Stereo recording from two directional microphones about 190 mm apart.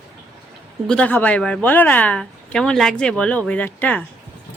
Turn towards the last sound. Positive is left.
turn(degrees=10)  # may be behind; listen again after turning